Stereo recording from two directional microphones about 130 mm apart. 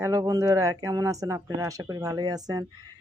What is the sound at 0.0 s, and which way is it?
Speech, 25° right (ahead or behind).